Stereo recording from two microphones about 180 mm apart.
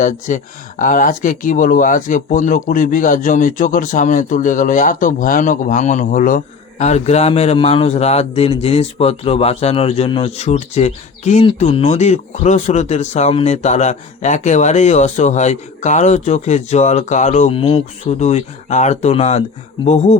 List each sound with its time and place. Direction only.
0.0 s speech: 45° left (ahead or behind)